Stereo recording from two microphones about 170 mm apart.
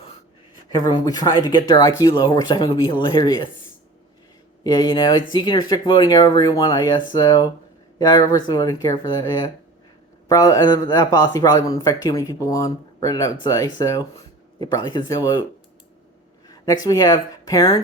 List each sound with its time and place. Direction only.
0.9 s a man's voice: 25° left (ahead or behind)
4.6 s a man's voice: 25° left (ahead or behind)
10.2 s a man's voice: 20° left (ahead or behind)
16.5 s speech: 20° left (ahead or behind)